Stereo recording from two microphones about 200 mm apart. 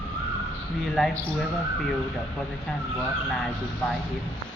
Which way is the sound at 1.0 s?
Centre (ahead or behind).